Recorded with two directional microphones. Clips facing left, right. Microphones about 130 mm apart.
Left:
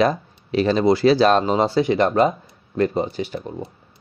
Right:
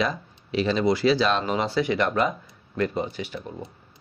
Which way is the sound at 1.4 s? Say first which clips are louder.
Left 6 dB; 35° left (ahead or behind).